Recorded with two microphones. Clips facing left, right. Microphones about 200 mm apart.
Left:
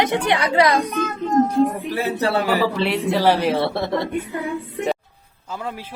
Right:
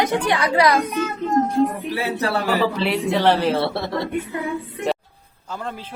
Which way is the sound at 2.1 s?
30° left (ahead or behind).